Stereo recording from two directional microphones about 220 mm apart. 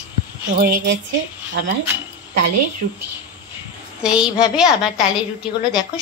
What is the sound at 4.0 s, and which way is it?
A woman's voice, 5° right (ahead or behind).